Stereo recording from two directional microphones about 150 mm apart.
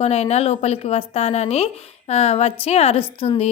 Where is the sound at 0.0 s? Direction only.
45° left (ahead or behind).